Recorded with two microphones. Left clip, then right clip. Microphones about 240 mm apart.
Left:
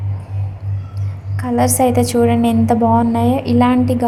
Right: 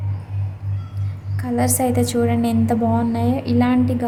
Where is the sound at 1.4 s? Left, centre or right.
Centre.